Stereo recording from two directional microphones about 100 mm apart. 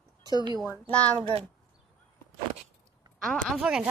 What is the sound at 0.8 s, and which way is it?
Speech, 15° left (ahead or behind).